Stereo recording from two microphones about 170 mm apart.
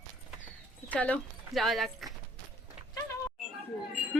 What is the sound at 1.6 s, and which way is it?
Music, centre (ahead or behind).